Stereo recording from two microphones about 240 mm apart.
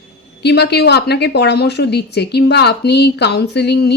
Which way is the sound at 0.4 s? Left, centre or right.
Left.